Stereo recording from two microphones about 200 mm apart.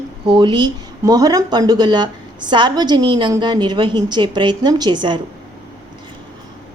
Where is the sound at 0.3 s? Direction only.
25° right (ahead or behind).